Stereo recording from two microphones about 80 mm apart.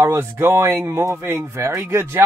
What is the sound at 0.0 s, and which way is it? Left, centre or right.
Speech, right.